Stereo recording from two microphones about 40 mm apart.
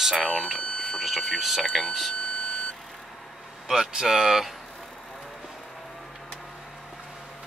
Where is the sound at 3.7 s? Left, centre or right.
Centre.